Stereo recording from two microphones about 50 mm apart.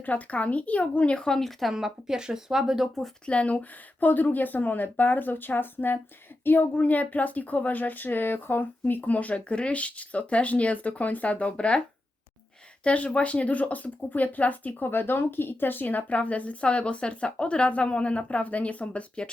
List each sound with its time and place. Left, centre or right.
0.0 s a woman's voice: left
1.3 s speech: centre
1.7 s speech: centre
3.2 s speech: left
12.8 s speech: left
14.8 s a woman's voice: left